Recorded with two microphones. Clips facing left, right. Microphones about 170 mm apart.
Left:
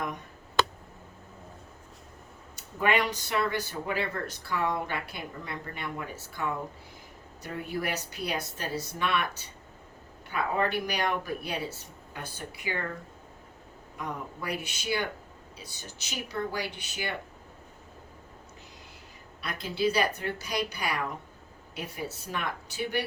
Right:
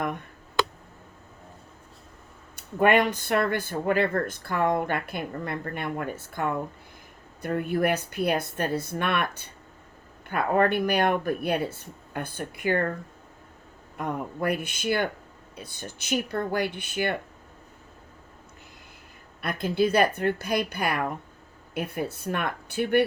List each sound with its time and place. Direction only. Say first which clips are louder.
2.6 s speech: right 6 dB; 55° right (ahead or behind)
13.9 s speech: right 6 dB; 55° right (ahead or behind)
19.4 s speech: right 6 dB; 55° right (ahead or behind)